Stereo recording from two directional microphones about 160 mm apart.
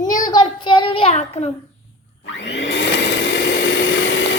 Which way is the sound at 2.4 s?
90° left.